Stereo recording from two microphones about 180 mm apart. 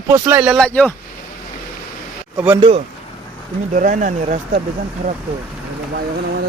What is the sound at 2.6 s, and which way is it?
Speech, 30° right (ahead or behind).